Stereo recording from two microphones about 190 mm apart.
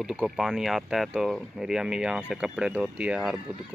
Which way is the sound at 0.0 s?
Centre (ahead or behind).